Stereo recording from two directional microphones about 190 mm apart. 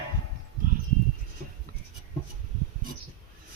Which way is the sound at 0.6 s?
45° right (ahead or behind).